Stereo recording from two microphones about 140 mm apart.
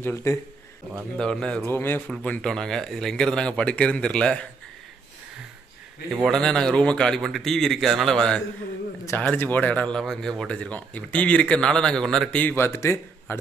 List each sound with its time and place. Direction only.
0.0 s a man's voice: 20° left (ahead or behind)
1.1 s a man's voice: 5° left (ahead or behind)
6.2 s a man's voice: 5° left (ahead or behind)